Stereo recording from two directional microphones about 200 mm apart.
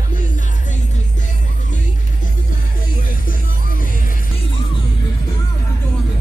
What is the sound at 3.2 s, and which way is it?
Music, 45° left (ahead or behind).